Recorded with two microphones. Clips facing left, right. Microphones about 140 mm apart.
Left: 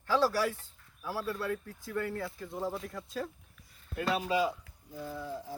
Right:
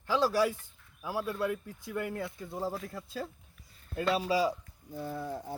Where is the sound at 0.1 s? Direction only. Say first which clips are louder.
Right 1 dB; 15° right (ahead or behind).